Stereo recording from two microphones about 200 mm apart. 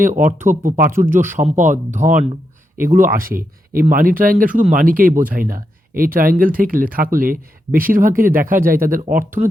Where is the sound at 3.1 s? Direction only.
45° right (ahead or behind).